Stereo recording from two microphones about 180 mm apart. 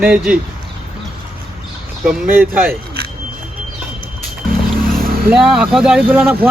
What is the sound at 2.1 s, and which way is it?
Speech, 10° right (ahead or behind).